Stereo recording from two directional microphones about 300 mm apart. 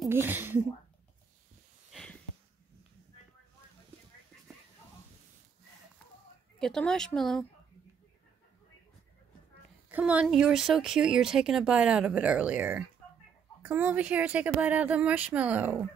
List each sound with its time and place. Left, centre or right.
0.0 s speech: centre
1.9 s a sound: centre
6.6 s speech: centre
9.8 s speech: centre